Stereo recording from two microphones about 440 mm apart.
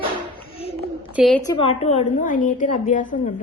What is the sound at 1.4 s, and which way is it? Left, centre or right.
A woman's voice, centre.